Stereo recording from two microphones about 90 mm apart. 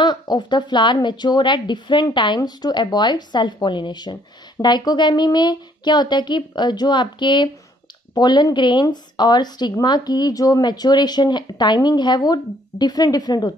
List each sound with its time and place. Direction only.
0.0 s speech: 55° left (ahead or behind)